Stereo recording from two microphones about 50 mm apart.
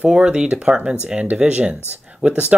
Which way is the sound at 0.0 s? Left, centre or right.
Centre.